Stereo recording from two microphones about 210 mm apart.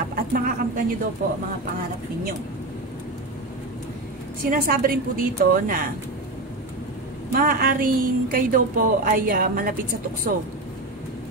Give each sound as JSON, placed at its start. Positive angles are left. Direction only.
{"t": 0.1, "sound": "a woman's voice", "side_deg": -40}
{"t": 4.5, "sound": "a woman's voice", "side_deg": -40}
{"t": 7.3, "sound": "a woman's voice", "side_deg": -45}